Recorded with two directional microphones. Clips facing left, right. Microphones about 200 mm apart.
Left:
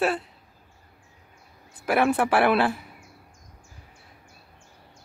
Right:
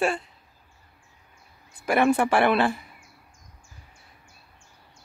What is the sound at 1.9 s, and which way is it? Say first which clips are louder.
Speech: right 1 dB; 5° left (ahead or behind).